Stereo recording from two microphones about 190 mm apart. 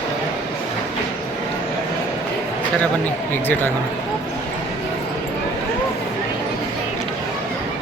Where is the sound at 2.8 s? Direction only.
10° left (ahead or behind).